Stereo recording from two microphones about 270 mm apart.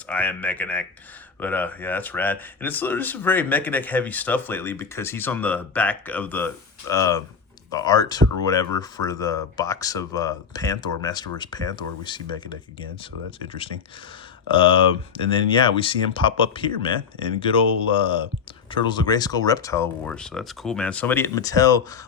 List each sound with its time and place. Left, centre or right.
0.1 s speech: centre
14.5 s speech: centre